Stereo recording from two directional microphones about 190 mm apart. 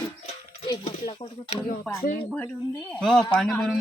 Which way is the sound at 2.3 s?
10° left (ahead or behind).